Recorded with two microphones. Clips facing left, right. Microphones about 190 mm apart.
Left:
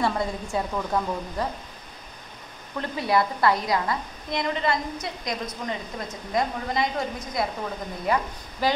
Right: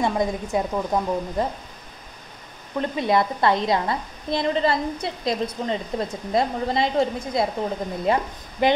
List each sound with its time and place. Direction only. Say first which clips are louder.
0.0 s a woman's voice: right 3 dB; 20° right (ahead or behind)
2.8 s a woman's voice: right 3 dB; 20° right (ahead or behind)